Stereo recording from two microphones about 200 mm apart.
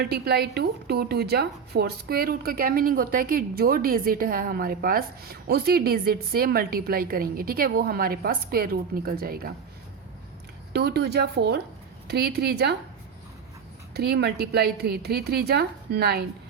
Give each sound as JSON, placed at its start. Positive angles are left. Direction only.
{"t": 0.0, "sound": "a woman's voice", "side_deg": -55}
{"t": 10.7, "sound": "a woman's voice", "side_deg": -55}
{"t": 13.9, "sound": "a woman's voice", "side_deg": -55}